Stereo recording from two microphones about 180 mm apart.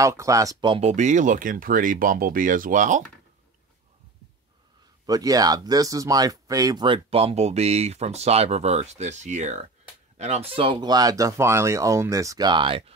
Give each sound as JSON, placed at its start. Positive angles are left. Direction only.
{"t": 0.0, "sound": "speech", "side_deg": -15}
{"t": 5.0, "sound": "speech", "side_deg": -20}